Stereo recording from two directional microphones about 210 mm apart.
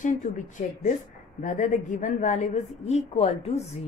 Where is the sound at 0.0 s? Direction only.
35° left (ahead or behind).